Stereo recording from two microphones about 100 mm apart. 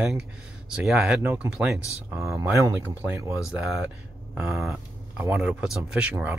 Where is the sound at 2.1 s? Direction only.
30° right (ahead or behind).